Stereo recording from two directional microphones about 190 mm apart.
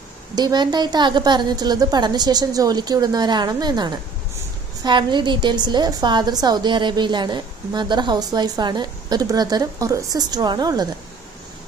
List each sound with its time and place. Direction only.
0.3 s a woman's voice: 20° right (ahead or behind)